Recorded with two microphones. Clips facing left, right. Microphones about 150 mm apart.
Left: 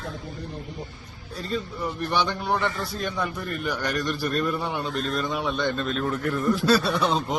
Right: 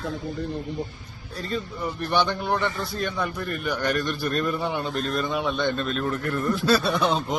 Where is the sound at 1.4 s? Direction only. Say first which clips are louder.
Even; centre (ahead or behind).